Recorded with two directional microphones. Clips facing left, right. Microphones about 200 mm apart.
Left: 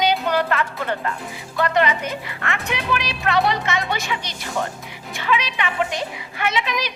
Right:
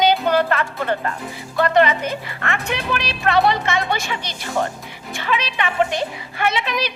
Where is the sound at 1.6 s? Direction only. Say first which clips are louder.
Right 3 dB; 35° right (ahead or behind).